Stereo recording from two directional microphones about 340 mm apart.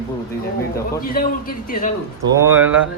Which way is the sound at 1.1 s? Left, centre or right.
Left.